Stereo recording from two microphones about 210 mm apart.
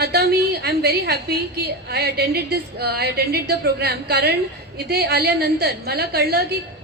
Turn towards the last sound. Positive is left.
turn(degrees=-45)  # may be behind; listen again after turning